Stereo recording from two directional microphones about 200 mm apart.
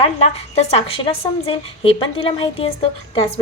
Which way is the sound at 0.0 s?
35° left (ahead or behind).